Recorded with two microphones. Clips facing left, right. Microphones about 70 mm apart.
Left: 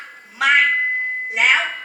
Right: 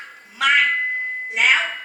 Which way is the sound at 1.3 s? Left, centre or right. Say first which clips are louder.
Left 1 dB; centre.